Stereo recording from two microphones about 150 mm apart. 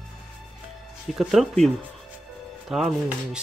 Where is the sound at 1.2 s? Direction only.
Centre (ahead or behind).